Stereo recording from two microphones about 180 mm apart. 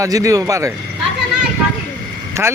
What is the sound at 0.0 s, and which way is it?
Speech, 20° right (ahead or behind).